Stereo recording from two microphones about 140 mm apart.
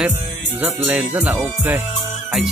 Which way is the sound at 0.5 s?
15° right (ahead or behind).